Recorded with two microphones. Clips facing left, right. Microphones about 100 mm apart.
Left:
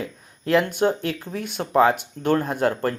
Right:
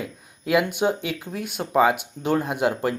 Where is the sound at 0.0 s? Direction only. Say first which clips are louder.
Left 2 dB; 5° right (ahead or behind).